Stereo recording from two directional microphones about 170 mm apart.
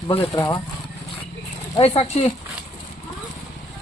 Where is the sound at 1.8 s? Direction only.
35° left (ahead or behind).